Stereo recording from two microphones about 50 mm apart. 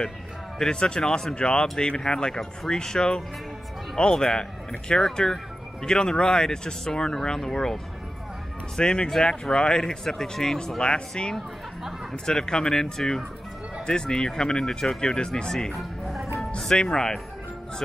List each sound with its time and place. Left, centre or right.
0.6 s speech: centre
15.7 s music: centre
16.5 s speech: centre